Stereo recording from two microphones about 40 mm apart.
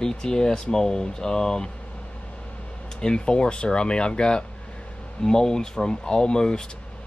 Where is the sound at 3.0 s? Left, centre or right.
Left.